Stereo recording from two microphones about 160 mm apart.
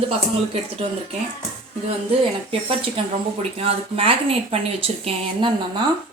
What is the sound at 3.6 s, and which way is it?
Speech, 35° right (ahead or behind).